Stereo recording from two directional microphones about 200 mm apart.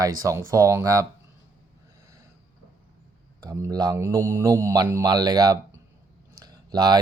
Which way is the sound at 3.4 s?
20° right (ahead or behind).